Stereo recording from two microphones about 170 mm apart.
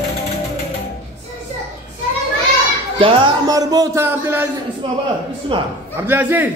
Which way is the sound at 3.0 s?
25° right (ahead or behind).